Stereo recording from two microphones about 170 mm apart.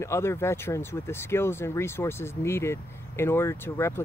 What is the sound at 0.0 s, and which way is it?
Speech, 15° left (ahead or behind).